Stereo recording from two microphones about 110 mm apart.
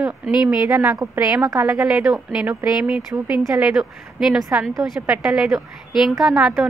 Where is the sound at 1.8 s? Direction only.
10° right (ahead or behind).